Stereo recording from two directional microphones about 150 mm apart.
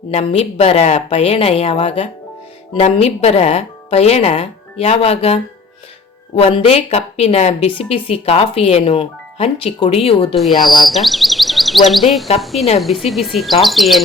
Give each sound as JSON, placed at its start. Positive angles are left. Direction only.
{"t": 0.1, "sound": "speech", "side_deg": 45}
{"t": 10.8, "sound": "insect", "side_deg": 0}
{"t": 12.4, "sound": "speech", "side_deg": 0}